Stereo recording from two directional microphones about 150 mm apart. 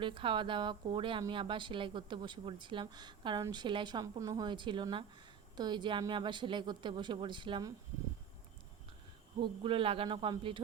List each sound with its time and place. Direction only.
0.0 s a woman's voice: 35° right (ahead or behind)
9.4 s a woman's voice: 35° right (ahead or behind)